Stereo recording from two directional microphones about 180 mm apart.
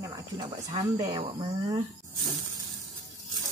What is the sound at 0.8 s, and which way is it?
Speech, 20° right (ahead or behind).